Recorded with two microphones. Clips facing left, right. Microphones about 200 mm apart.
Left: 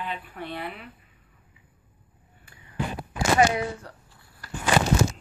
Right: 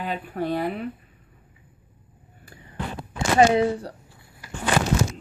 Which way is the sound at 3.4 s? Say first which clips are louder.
Right 8 dB; 30° right (ahead or behind).